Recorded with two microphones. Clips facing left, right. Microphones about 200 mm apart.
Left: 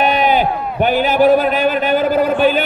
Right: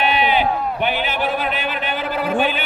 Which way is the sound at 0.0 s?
45° left (ahead or behind).